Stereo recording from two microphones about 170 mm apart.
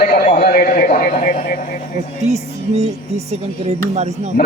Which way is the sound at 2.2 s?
40° right (ahead or behind).